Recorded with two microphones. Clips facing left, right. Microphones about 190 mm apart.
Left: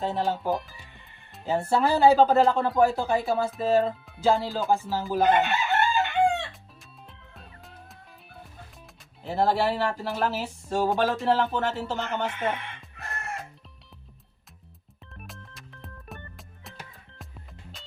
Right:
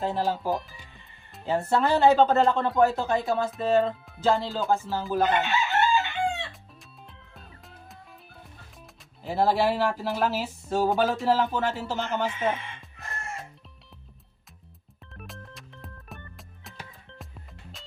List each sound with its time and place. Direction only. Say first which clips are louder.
0.0 s speech: even; centre (ahead or behind)
5.4 s chicken: left 1 dB; 60° left (ahead or behind)
7.1 s music: left 1 dB; centre (ahead or behind)
9.2 s speech: right 1 dB; 5° right (ahead or behind)
12.5 s chicken: left 1 dB; 60° left (ahead or behind)
15.3 s music: right 2 dB; centre (ahead or behind)